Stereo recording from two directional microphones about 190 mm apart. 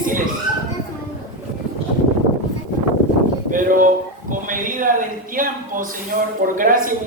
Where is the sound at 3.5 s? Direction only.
45° right (ahead or behind).